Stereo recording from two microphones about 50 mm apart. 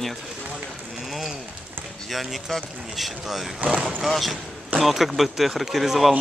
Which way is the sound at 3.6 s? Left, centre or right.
Centre.